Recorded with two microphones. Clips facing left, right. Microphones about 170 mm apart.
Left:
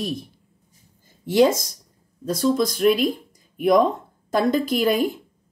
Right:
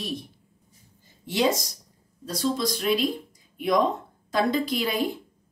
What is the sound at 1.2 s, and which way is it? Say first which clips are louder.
Speech: left 7 dB; 50° left (ahead or behind).